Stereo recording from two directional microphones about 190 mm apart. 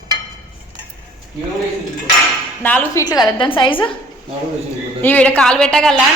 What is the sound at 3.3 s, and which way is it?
Speech, 25° left (ahead or behind).